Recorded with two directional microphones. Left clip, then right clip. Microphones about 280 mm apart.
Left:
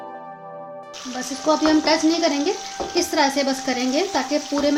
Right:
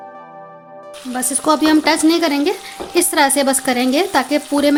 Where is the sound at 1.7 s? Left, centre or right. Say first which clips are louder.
Right 5 dB; right.